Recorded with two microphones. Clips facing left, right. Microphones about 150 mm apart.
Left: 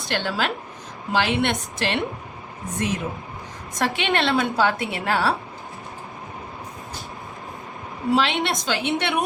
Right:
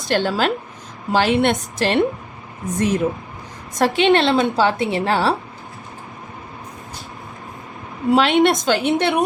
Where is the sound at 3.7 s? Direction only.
35° right (ahead or behind).